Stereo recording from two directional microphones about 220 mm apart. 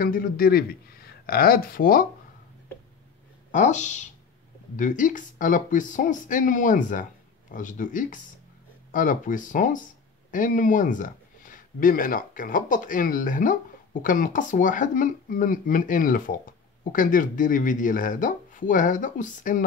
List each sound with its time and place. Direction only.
0.0 s speech: 40° left (ahead or behind)
3.5 s speech: 35° left (ahead or behind)